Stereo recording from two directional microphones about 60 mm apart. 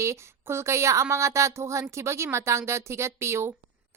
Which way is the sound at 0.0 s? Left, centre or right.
Right.